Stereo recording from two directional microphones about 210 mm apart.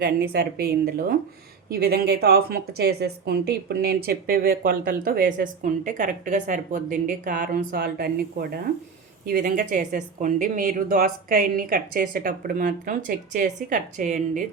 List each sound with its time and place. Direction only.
0.0 s a woman's voice: 45° right (ahead or behind)